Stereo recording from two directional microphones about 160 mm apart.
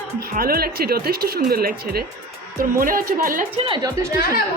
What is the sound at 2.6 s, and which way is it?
Speech, 60° right (ahead or behind).